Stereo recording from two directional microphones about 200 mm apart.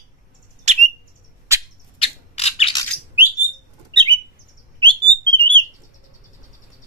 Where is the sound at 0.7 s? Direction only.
35° right (ahead or behind).